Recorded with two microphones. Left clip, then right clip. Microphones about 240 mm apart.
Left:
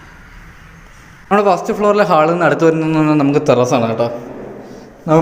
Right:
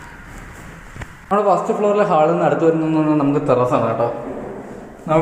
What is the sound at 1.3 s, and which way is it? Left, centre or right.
Speech, left.